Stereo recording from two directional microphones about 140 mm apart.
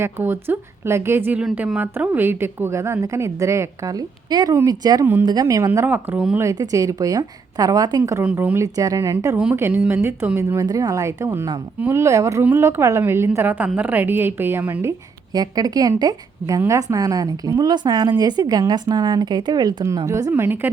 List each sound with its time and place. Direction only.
0.0 s a woman's voice: 15° right (ahead or behind)
5.8 s a woman's voice: 10° right (ahead or behind)
6.4 s a woman's voice: 25° right (ahead or behind)
8.2 s a woman's voice: 10° right (ahead or behind)
8.6 s a woman's voice: 25° right (ahead or behind)